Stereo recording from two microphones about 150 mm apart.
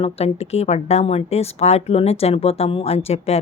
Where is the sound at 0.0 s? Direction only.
45° left (ahead or behind).